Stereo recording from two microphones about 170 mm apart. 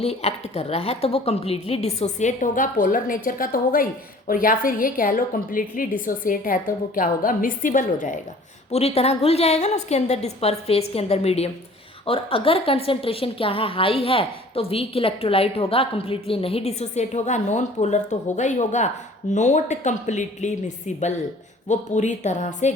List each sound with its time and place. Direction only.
0.0 s a woman's voice: 40° left (ahead or behind)
8.7 s a woman's voice: 40° left (ahead or behind)